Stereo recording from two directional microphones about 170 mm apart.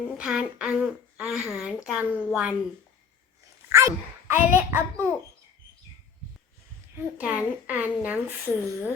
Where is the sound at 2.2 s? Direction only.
5° right (ahead or behind).